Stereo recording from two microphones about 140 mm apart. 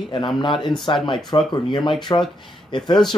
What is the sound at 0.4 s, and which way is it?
Speech, 35° left (ahead or behind).